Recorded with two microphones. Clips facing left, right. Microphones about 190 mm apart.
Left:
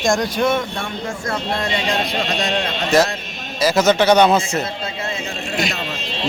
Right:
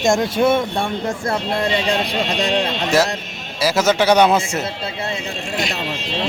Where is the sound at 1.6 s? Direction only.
30° right (ahead or behind).